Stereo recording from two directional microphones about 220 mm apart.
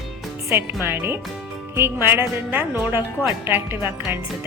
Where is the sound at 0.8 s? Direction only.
10° right (ahead or behind).